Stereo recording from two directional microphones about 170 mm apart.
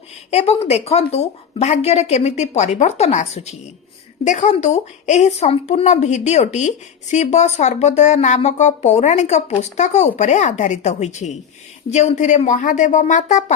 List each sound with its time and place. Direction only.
0.3 s a woman's voice: 40° left (ahead or behind)